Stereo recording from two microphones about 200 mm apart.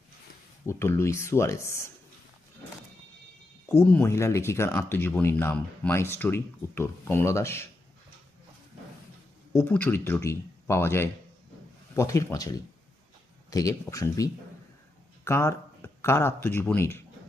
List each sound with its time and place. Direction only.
0.6 s speech: 15° left (ahead or behind)
3.7 s speech: 10° left (ahead or behind)
9.5 s speech: 10° left (ahead or behind)